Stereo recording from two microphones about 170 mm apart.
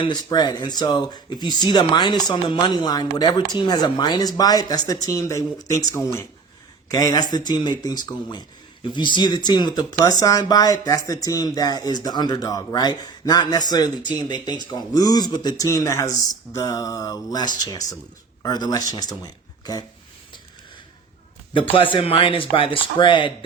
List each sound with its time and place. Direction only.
0.3 s speech: 25° left (ahead or behind)
21.9 s speech: 30° left (ahead or behind)